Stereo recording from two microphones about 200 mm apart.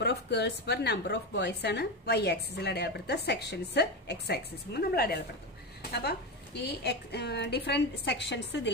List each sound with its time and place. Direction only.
0.0 s a woman's voice: 55° left (ahead or behind)
5.8 s a sound: 55° left (ahead or behind)
6.6 s a woman's voice: 55° left (ahead or behind)